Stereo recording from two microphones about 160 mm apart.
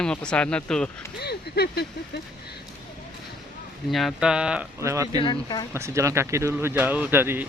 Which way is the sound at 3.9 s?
Centre (ahead or behind).